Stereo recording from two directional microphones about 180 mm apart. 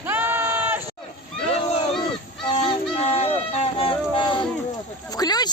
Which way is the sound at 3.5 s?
35° left (ahead or behind).